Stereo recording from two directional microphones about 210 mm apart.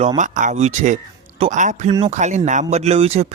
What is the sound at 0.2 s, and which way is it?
Speech, 35° right (ahead or behind).